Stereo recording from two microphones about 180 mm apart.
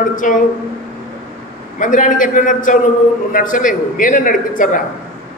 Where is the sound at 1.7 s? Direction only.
45° left (ahead or behind).